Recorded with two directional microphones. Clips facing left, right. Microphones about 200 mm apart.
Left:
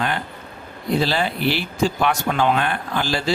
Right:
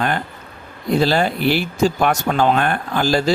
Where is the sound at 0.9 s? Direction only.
45° right (ahead or behind).